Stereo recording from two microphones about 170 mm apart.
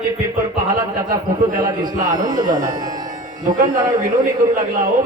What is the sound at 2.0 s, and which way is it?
Speech, 55° right (ahead or behind).